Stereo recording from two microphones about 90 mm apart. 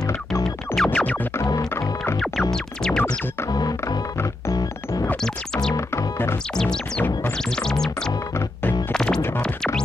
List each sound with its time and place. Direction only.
0.3 s music: centre (ahead or behind)
0.9 s music: 15° left (ahead or behind)
1.5 s music: 45° left (ahead or behind)
2.5 s music: 5° left (ahead or behind)
3.4 s music: 45° left (ahead or behind)
5.2 s music: 5° left (ahead or behind)
5.8 s music: 30° left (ahead or behind)
6.5 s music: 5° left (ahead or behind)
7.0 s music: 20° left (ahead or behind)
7.5 s music: 5° left (ahead or behind)